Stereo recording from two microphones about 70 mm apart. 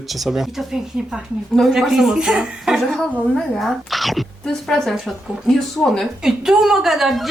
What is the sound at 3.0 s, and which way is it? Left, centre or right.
Speech, centre.